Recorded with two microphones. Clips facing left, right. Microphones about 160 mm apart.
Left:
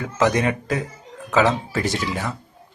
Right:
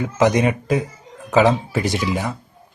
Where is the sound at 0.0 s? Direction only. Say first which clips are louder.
Right 3 dB; 15° right (ahead or behind).